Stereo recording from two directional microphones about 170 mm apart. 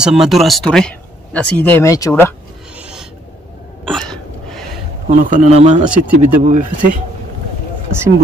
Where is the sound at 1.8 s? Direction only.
20° left (ahead or behind).